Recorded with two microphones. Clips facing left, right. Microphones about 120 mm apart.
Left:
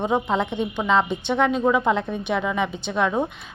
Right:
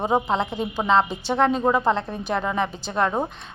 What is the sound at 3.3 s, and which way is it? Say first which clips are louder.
Speech: right 1 dB; 30° right (ahead or behind).